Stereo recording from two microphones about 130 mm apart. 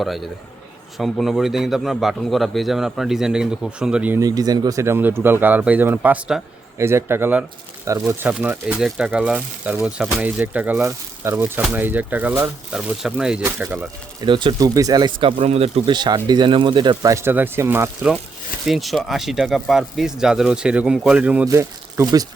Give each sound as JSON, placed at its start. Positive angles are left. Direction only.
{"t": 0.0, "sound": "a man's voice", "side_deg": 0}
{"t": 4.2, "sound": "speech", "side_deg": -30}
{"t": 6.7, "sound": "speech", "side_deg": -20}
{"t": 8.3, "sound": "speech", "side_deg": -10}
{"t": 13.4, "sound": "speech", "side_deg": -15}
{"t": 14.2, "sound": "speech", "side_deg": -35}
{"t": 15.9, "sound": "speech", "side_deg": -35}
{"t": 18.6, "sound": "a man's voice", "side_deg": 0}
{"t": 21.4, "sound": "speech", "side_deg": -25}